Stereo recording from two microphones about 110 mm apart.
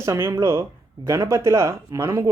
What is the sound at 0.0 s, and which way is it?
Speech, 25° right (ahead or behind).